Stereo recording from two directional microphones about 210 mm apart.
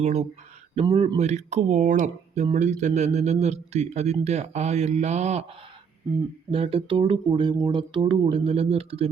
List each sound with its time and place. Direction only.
0.0 s speech: 30° right (ahead or behind)
6.5 s speech: 25° right (ahead or behind)